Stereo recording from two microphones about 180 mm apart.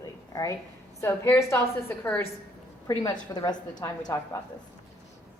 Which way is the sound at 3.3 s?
20° left (ahead or behind).